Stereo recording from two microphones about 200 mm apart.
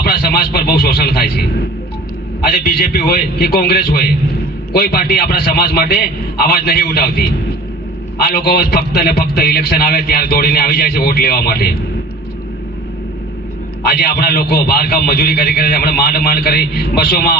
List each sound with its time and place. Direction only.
0.0 s a man's voice: 50° left (ahead or behind)
13.8 s a man's voice: 50° left (ahead or behind)